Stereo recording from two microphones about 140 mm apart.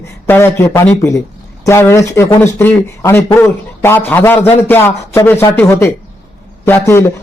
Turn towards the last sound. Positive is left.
turn(degrees=20)  # may be behind; listen again after turning